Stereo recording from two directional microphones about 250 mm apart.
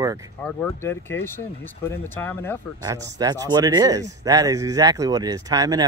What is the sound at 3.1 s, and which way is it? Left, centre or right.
Speech, centre.